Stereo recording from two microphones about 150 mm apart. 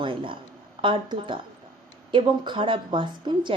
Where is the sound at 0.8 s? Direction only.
35° right (ahead or behind).